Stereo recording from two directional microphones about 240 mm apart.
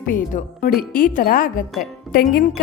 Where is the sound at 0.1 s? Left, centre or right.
Left.